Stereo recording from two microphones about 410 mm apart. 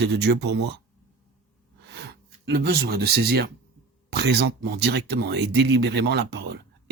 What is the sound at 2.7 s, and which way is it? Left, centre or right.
Speech, right.